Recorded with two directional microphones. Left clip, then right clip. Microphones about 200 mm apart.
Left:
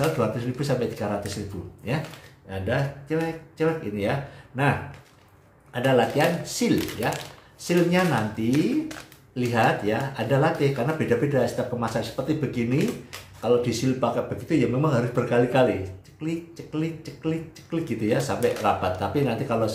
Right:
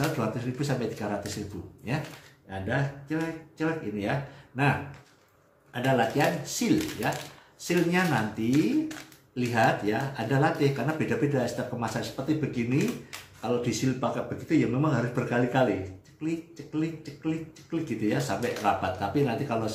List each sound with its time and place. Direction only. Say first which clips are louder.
0.2 s speech: left 5 dB; 10° left (ahead or behind)
2.7 s speech: left 4 dB; 10° left (ahead or behind)